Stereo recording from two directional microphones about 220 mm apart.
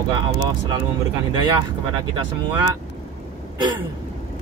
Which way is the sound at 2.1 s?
15° right (ahead or behind).